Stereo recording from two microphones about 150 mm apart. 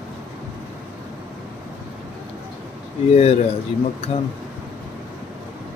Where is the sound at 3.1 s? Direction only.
45° left (ahead or behind).